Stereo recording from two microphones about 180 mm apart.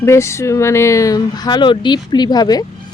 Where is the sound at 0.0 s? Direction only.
15° left (ahead or behind).